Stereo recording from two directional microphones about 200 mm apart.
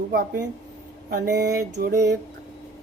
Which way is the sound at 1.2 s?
50° right (ahead or behind).